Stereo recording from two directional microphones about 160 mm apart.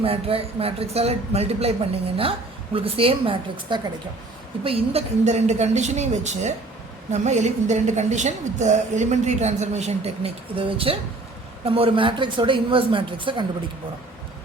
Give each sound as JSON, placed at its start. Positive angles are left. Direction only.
{"t": 0.0, "sound": "a man's voice", "side_deg": -35}